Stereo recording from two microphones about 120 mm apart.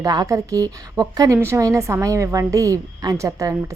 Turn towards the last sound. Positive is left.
turn(degrees=-25)  # may be behind; listen again after turning